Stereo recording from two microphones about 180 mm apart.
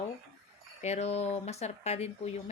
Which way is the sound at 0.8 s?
40° left (ahead or behind).